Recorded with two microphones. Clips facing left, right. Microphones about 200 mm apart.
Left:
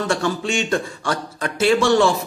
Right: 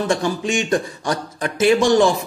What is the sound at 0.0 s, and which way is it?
Speech, 15° right (ahead or behind).